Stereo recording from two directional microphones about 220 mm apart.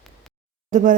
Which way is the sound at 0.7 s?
35° right (ahead or behind).